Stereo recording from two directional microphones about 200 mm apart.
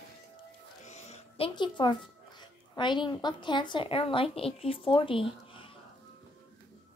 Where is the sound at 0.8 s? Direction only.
35° left (ahead or behind).